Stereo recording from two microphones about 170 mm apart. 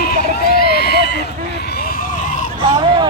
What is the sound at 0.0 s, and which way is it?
Run, 65° left (ahead or behind).